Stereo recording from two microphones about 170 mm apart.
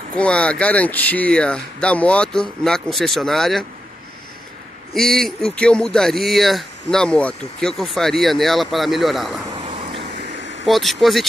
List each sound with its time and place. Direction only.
0.1 s speech: 5° left (ahead or behind)
4.9 s speech: centre (ahead or behind)
9.7 s vehicle: 30° right (ahead or behind)
10.7 s speech: centre (ahead or behind)